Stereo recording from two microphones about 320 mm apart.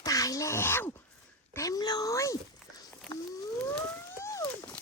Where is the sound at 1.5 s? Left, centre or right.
Centre.